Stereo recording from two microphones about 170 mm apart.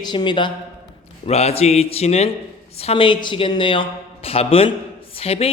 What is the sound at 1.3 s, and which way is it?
A man's voice, 40° left (ahead or behind).